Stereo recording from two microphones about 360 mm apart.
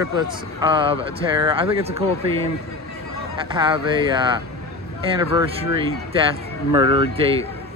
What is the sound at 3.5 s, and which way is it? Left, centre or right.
Speech, centre.